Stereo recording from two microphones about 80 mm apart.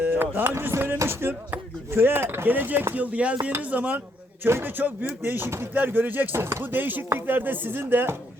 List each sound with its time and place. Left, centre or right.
0.0 s music: right
0.5 s speech: right